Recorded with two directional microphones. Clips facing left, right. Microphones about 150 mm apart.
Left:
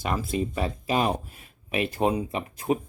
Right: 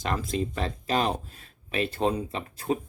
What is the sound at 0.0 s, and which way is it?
Speech, 10° left (ahead or behind).